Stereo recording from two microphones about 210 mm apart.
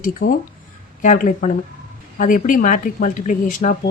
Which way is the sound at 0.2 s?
40° left (ahead or behind).